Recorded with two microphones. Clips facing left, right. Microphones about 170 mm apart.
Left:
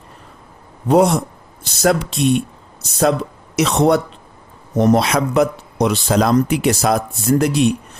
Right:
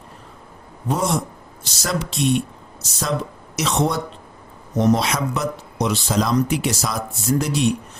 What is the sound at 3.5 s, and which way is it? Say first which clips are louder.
Speech: left 7 dB; 60° left (ahead or behind).